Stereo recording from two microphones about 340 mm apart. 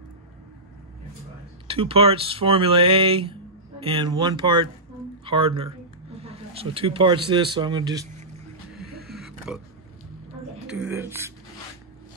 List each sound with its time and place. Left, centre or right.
1.7 s a man's voice: centre
9.5 s speech: centre
10.7 s speech: centre